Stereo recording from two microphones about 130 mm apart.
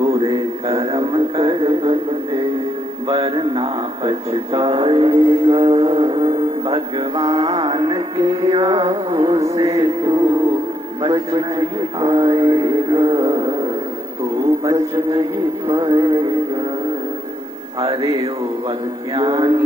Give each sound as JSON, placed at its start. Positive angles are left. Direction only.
{"t": 0.0, "sound": "a sound", "side_deg": -45}
{"t": 0.3, "sound": "a sound", "side_deg": -35}
{"t": 0.8, "sound": "music", "side_deg": -45}
{"t": 3.1, "sound": "speech", "side_deg": -50}
{"t": 9.0, "sound": "music", "side_deg": -45}
{"t": 9.4, "sound": "speech", "side_deg": -25}
{"t": 14.6, "sound": "mantra", "side_deg": -25}
{"t": 15.6, "sound": "speech", "side_deg": -40}
{"t": 18.0, "sound": "mantra", "side_deg": -30}
{"t": 19.1, "sound": "speech", "side_deg": -35}